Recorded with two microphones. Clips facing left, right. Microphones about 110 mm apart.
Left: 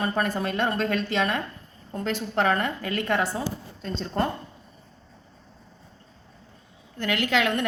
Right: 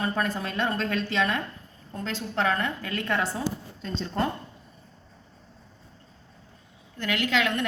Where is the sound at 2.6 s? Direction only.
5° left (ahead or behind).